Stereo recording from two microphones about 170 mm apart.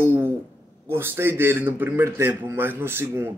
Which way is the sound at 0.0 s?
10° right (ahead or behind).